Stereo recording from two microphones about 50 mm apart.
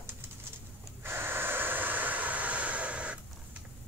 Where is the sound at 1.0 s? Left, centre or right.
Right.